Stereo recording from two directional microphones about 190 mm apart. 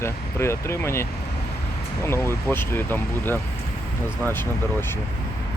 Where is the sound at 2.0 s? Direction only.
15° left (ahead or behind).